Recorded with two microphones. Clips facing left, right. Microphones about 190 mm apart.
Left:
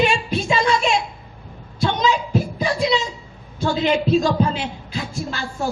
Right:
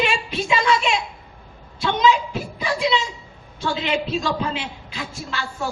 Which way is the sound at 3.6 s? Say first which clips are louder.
Left 5 dB; 40° left (ahead or behind).